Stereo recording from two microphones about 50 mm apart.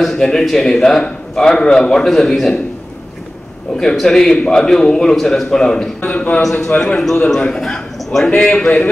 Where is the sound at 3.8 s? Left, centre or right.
Centre.